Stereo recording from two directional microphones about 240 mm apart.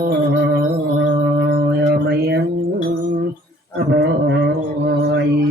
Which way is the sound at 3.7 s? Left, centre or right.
Right.